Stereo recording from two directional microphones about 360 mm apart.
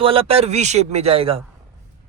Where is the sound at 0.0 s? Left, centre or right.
Centre.